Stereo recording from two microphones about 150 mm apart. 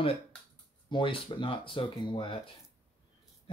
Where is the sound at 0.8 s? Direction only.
35° left (ahead or behind).